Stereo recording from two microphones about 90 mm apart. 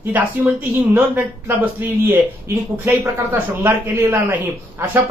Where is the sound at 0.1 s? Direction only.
20° right (ahead or behind).